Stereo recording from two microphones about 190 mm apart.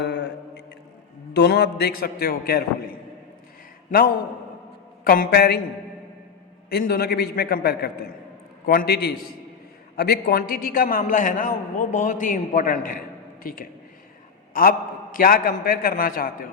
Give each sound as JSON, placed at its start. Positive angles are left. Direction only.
{"t": 0.0, "sound": "mantra", "side_deg": 65}
{"t": 1.3, "sound": "a man's voice", "side_deg": 65}
{"t": 5.0, "sound": "a man's voice", "side_deg": 50}
{"t": 6.7, "sound": "a man's voice", "side_deg": 55}